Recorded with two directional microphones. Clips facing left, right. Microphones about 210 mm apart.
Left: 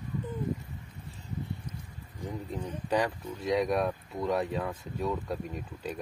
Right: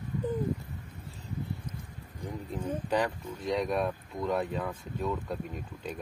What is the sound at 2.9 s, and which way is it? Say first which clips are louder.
Speech: left 2 dB; 5° left (ahead or behind).